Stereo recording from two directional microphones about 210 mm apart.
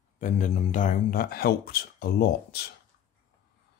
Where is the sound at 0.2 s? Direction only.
35° left (ahead or behind).